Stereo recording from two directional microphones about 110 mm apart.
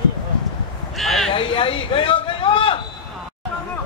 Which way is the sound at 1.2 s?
55° left (ahead or behind).